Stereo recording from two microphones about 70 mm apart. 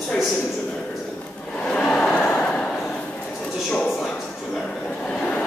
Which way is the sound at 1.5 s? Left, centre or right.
Centre.